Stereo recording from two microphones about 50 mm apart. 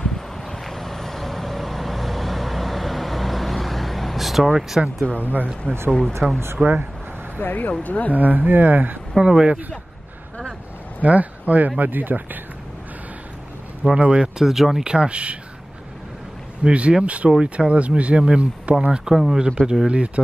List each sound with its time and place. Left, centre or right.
0.0 s vehicle: centre
5.0 s speech: left
5.9 s speech: centre
6.6 s speech: right
7.3 s speech: left
8.1 s speech: right
9.1 s speech: centre
11.0 s speech: right
13.9 s speech: right
14.4 s speech: centre
14.9 s speech: centre
16.6 s speech: right
18.9 s speech: centre